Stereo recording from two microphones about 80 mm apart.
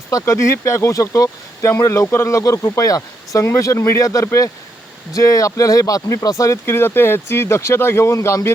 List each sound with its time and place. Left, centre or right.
0.1 s speech: left